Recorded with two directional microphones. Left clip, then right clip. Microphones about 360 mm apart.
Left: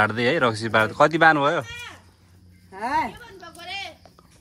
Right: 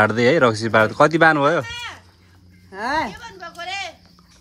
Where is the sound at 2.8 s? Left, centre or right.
Centre.